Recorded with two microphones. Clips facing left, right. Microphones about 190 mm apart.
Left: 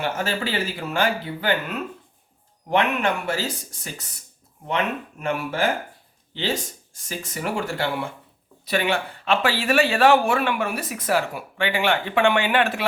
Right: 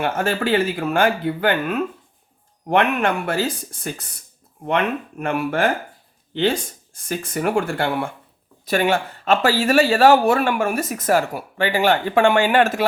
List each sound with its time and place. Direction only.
0.0 s speech: 55° right (ahead or behind)